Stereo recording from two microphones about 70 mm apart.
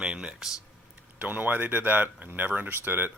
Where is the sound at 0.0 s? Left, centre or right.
Centre.